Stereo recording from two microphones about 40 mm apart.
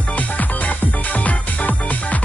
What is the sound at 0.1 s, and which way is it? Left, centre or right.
Music, left.